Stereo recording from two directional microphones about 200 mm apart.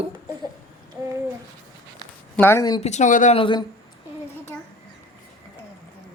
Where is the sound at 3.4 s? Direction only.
25° left (ahead or behind).